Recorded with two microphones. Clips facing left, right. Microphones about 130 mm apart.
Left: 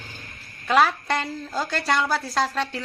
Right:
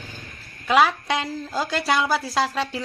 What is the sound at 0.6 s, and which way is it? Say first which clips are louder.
A woman's voice: right 1 dB; 5° right (ahead or behind).